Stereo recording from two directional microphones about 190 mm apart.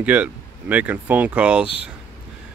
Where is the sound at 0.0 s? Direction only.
10° right (ahead or behind).